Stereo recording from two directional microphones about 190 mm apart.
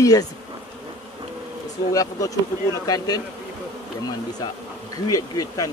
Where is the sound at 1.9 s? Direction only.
20° left (ahead or behind).